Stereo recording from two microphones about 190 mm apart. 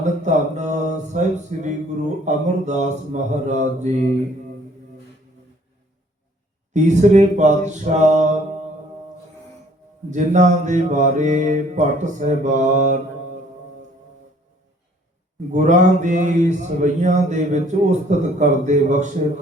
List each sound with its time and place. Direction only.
0.0 s mantra: 40° right (ahead or behind)
2.2 s speech: 40° right (ahead or behind)
6.7 s speech: 40° right (ahead or behind)
10.1 s speech: 40° right (ahead or behind)
15.5 s speech: 40° right (ahead or behind)